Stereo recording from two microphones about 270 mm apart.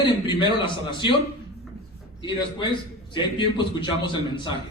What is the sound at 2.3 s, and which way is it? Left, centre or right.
A man's voice, centre.